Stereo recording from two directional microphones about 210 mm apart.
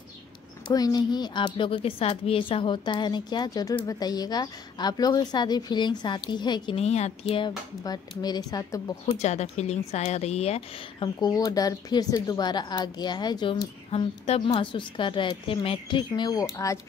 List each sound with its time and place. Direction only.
0.7 s a woman's voice: 20° left (ahead or behind)
9.0 s a woman's voice: 30° left (ahead or behind); by 16.8 s 15° left (ahead or behind)